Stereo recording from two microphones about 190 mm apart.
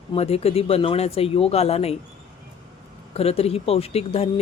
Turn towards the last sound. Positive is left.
turn(degrees=30)  # may be behind; listen again after turning